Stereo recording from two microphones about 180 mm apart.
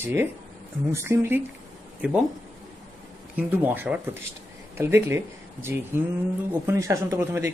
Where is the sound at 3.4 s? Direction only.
10° right (ahead or behind).